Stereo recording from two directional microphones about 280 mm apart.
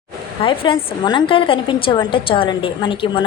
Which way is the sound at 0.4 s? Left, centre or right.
Centre.